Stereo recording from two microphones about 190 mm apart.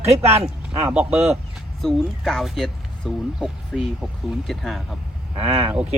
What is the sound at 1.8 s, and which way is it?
Speech, centre (ahead or behind).